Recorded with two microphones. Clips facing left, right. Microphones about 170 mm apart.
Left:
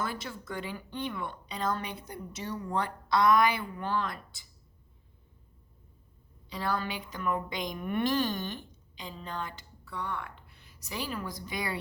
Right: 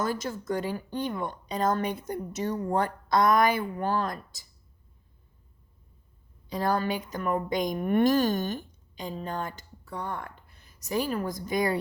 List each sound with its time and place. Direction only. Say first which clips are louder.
0.0 s a woman's voice: right 6 dB; 40° right (ahead or behind)
6.5 s a woman's voice: right 6 dB; 45° right (ahead or behind)